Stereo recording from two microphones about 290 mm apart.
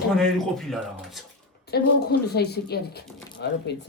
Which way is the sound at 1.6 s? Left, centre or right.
Left.